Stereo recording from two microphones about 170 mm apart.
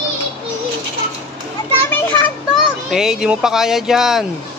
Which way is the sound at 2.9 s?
Centre (ahead or behind).